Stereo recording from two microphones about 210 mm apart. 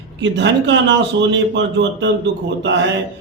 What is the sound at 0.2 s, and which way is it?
A man's voice, 55° right (ahead or behind).